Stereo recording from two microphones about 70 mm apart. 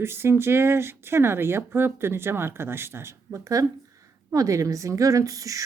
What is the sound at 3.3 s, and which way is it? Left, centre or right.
Speech, right.